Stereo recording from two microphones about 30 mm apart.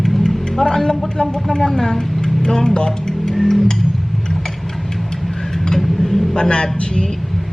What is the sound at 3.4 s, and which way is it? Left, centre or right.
Music, centre.